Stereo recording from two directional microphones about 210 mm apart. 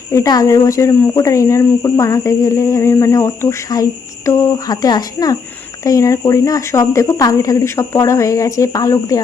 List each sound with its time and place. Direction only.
0.1 s speech: 15° left (ahead or behind)